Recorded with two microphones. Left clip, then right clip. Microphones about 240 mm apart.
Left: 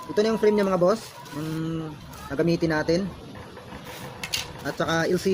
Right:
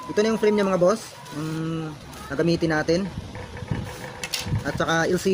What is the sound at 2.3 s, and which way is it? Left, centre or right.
Speech, centre.